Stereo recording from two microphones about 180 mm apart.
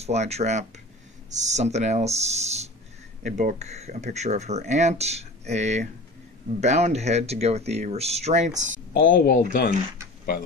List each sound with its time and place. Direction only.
0.0 s speech: 35° right (ahead or behind)
8.9 s speech: 55° left (ahead or behind)